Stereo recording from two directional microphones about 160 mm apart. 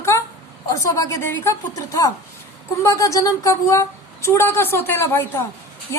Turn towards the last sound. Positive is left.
turn(degrees=20)  # may be behind; listen again after turning